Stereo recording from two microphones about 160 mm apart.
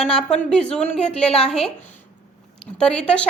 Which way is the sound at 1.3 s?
40° left (ahead or behind).